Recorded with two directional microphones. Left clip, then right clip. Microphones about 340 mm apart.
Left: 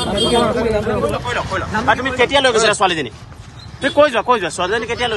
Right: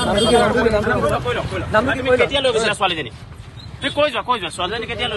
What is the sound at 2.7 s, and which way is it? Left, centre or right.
Speech, left.